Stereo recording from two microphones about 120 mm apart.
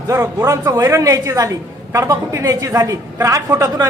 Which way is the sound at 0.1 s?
25° right (ahead or behind).